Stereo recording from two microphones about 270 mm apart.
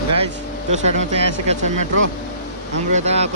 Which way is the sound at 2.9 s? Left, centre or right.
Right.